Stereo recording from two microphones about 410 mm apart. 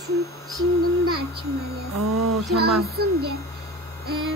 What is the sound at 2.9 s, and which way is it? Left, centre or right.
Speech, right.